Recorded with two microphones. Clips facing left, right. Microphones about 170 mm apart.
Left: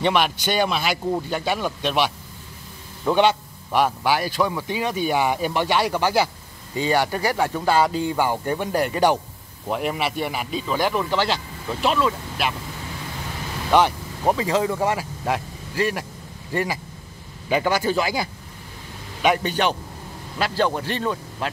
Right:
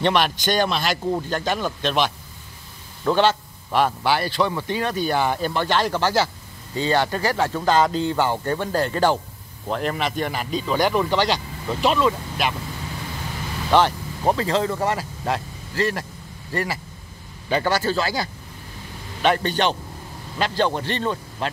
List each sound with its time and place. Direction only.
0.0 s speech: 5° left (ahead or behind)
13.7 s speech: 5° left (ahead or behind)